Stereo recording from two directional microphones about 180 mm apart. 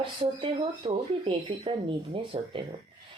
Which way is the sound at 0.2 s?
30° right (ahead or behind).